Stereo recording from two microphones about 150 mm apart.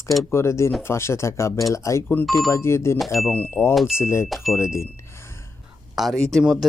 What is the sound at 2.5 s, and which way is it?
Speech, 15° left (ahead or behind).